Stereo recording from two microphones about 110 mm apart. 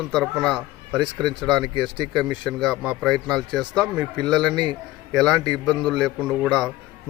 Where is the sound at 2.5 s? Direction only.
Centre (ahead or behind).